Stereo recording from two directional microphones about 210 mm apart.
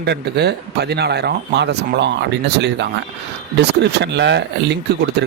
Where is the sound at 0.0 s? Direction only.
50° right (ahead or behind).